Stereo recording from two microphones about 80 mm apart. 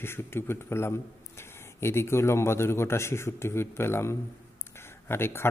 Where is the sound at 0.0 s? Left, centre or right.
Left.